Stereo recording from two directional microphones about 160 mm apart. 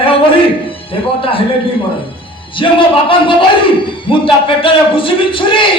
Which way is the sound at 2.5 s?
35° left (ahead or behind).